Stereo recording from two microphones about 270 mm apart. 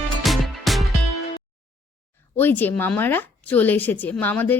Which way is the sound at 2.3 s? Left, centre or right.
Centre.